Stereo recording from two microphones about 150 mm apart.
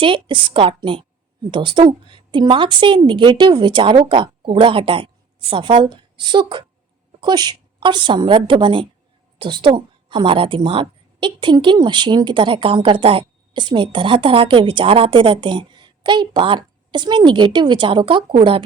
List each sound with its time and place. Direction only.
0.0 s a woman's voice: 35° right (ahead or behind)